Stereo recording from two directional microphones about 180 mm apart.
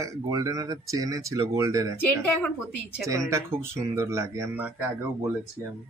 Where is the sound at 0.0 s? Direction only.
20° right (ahead or behind).